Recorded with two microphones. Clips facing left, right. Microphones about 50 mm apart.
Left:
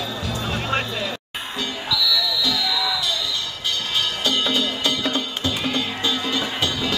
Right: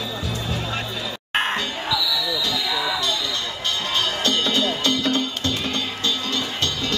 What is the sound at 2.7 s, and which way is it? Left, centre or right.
Music, right.